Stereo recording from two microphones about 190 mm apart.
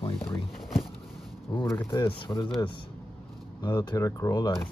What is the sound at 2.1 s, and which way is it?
Speech, 25° left (ahead or behind).